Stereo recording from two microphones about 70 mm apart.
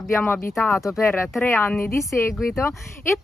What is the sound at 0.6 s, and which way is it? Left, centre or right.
Speech, centre.